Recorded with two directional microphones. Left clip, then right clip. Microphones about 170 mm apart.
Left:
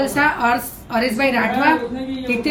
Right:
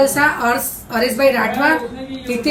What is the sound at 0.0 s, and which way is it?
A woman's voice, 20° left (ahead or behind).